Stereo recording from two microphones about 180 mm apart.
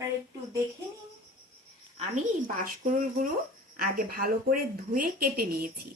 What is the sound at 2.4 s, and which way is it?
A woman's voice, 50° right (ahead or behind).